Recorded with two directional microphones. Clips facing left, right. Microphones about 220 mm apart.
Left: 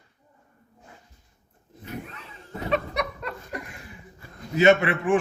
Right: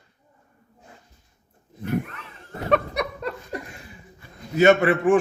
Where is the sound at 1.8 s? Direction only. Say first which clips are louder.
Right 10 dB; 60° right (ahead or behind).